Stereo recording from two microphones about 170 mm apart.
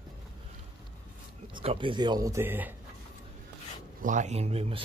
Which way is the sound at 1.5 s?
30° right (ahead or behind).